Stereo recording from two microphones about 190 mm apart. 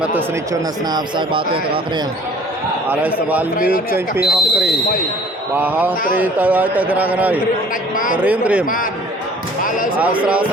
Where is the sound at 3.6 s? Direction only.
50° left (ahead or behind).